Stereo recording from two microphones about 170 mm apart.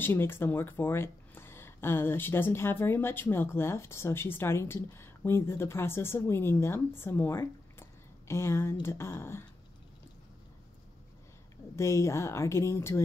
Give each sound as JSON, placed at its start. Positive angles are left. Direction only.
{"t": 0.0, "sound": "speech", "side_deg": 15}
{"t": 11.7, "sound": "speech", "side_deg": 15}